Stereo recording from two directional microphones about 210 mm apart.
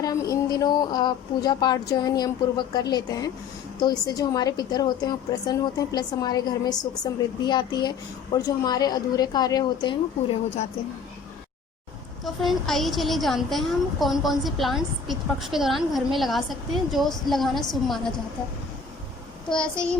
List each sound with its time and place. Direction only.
0.0 s a woman's voice: 15° left (ahead or behind)
12.2 s a woman's voice: centre (ahead or behind)
19.5 s a woman's voice: 5° left (ahead or behind)